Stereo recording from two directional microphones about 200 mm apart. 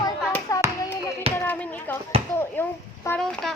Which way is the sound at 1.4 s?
10° left (ahead or behind).